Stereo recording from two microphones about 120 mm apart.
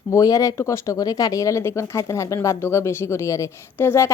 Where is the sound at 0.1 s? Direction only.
30° left (ahead or behind).